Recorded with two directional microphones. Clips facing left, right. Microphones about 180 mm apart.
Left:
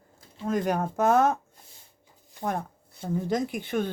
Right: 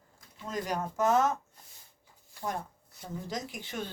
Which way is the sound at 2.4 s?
55° left (ahead or behind).